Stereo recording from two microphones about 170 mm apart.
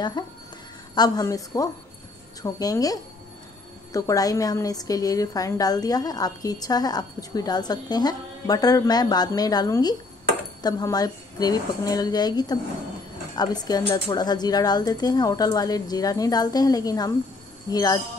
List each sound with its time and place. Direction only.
0.2 s a woman's voice: 25° left (ahead or behind)